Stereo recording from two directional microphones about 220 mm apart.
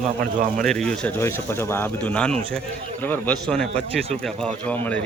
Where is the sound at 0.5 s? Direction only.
Centre (ahead or behind).